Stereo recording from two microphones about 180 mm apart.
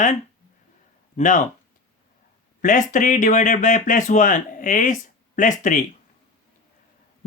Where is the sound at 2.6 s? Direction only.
45° left (ahead or behind).